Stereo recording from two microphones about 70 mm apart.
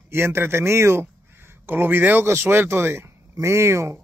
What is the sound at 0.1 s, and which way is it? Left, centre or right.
A man's voice, right.